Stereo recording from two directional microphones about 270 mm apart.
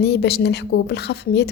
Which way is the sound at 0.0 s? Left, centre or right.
Left.